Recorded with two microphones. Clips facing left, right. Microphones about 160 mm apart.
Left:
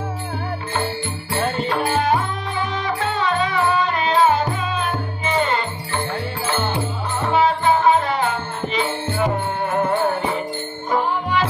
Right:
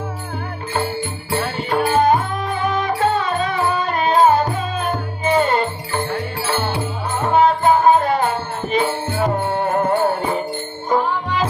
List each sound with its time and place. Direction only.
1.7 s music: 50° right (ahead or behind)
6.7 s music: 50° right (ahead or behind)